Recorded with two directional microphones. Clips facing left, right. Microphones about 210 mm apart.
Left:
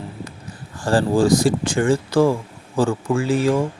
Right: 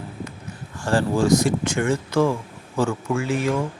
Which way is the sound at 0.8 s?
35° left (ahead or behind).